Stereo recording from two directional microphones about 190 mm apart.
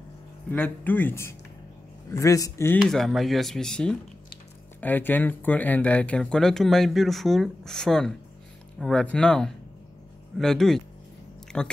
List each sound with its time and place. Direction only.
0.5 s speech: 10° left (ahead or behind)
2.8 s speech: centre (ahead or behind)
11.5 s a sound: 5° left (ahead or behind)